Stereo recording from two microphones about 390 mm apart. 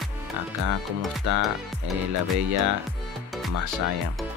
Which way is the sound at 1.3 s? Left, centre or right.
Right.